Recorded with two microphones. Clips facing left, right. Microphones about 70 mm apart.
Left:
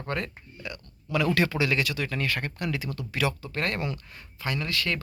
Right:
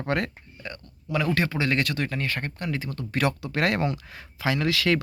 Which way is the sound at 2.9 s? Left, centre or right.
Right.